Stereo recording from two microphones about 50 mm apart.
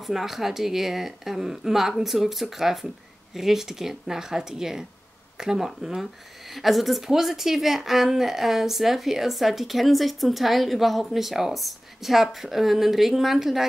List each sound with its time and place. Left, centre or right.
0.0 s a woman's voice: centre